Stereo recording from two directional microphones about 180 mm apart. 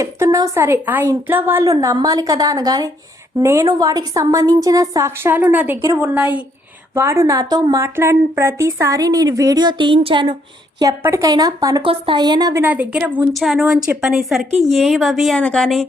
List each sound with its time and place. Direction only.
0.0 s a woman's voice: 15° right (ahead or behind)
10.8 s a woman's voice: 15° right (ahead or behind)
12.6 s a woman's voice: 10° right (ahead or behind)